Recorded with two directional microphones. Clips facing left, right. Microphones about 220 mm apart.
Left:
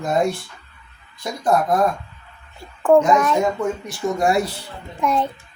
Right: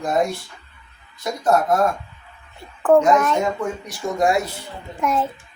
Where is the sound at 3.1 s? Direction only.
Centre (ahead or behind).